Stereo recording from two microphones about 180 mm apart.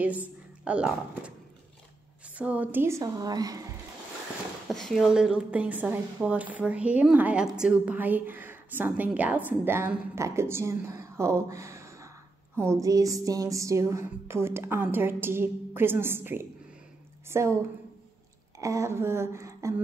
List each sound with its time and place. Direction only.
0.0 s a woman's voice: 10° right (ahead or behind)
2.3 s a woman's voice: 10° right (ahead or behind)
4.6 s a woman's voice: centre (ahead or behind); by 17.6 s 15° right (ahead or behind)
18.6 s a woman's voice: 15° right (ahead or behind)